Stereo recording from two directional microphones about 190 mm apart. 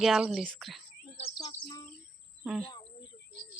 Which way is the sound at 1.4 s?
25° left (ahead or behind).